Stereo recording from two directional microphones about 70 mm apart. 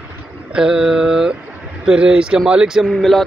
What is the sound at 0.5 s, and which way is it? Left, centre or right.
Speech, centre.